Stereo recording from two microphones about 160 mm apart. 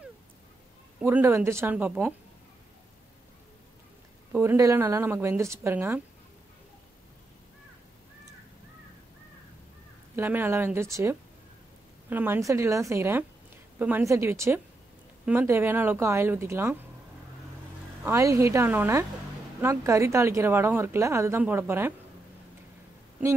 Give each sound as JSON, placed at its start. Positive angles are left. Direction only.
{"t": 0.9, "sound": "a woman's voice", "side_deg": -10}
{"t": 4.3, "sound": "a woman's voice", "side_deg": -15}
{"t": 10.1, "sound": "a woman's voice", "side_deg": -15}
{"t": 18.0, "sound": "a woman's voice", "side_deg": -20}